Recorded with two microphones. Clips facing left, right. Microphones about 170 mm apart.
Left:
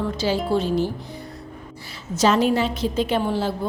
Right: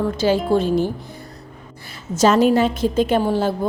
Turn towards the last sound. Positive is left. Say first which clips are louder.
# right 4 dB
turn(degrees=-45)  # may be behind; listen again after turning